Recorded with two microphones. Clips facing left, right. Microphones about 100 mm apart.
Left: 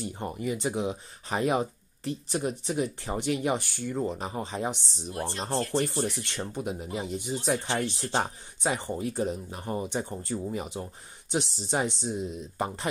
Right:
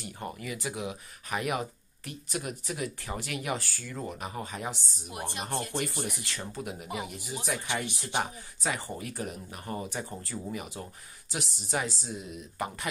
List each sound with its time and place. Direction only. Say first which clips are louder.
0.0 s speech: left 6 dB; 25° left (ahead or behind)
5.1 s speech: left 4 dB; 15° right (ahead or behind)
6.1 s speech: left 4 dB; 25° left (ahead or behind)